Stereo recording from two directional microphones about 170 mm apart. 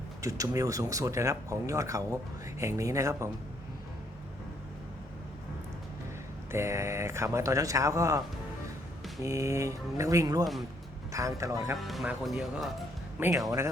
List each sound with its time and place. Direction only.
0.2 s speech: 20° right (ahead or behind)
6.5 s speech: 15° right (ahead or behind)
9.2 s speech: 20° right (ahead or behind)
11.8 s speech: centre (ahead or behind)
13.1 s speech: 10° right (ahead or behind)